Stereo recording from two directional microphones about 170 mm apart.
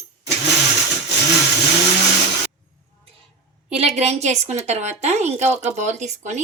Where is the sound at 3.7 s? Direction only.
40° right (ahead or behind).